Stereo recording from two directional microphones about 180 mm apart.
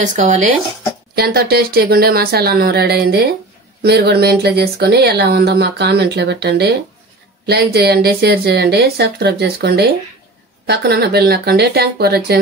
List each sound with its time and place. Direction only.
0.0 s speech: 45° right (ahead or behind)
1.1 s speech: 60° right (ahead or behind)